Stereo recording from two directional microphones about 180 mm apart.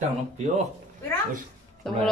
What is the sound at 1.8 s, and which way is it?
Speech, centre (ahead or behind).